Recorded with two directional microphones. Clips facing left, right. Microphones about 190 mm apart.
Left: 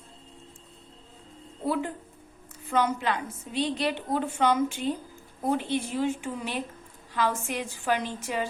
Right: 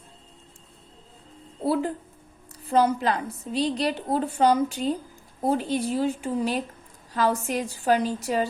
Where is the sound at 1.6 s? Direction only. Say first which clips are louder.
Right 4 dB; 35° right (ahead or behind).